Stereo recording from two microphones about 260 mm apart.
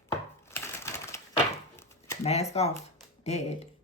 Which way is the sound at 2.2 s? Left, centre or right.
Left.